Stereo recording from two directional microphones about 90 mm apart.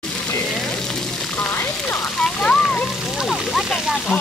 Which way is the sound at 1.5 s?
20° left (ahead or behind).